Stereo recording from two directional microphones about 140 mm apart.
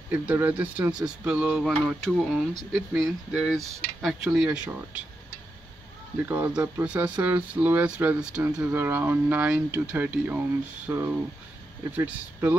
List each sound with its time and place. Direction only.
0.1 s speech: 10° right (ahead or behind)
6.2 s speech: 15° right (ahead or behind)